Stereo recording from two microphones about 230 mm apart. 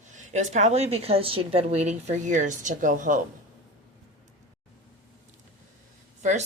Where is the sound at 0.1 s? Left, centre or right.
Right.